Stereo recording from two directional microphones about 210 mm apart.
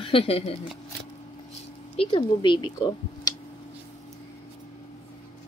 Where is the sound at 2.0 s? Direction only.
20° left (ahead or behind).